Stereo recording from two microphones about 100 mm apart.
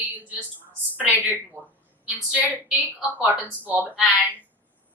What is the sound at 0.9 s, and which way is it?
Speech, 15° left (ahead or behind).